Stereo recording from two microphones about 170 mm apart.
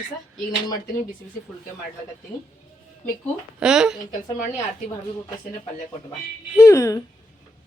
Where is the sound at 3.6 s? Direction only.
5° right (ahead or behind).